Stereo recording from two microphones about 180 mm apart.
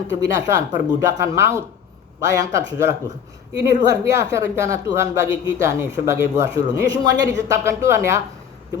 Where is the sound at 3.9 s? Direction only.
15° right (ahead or behind).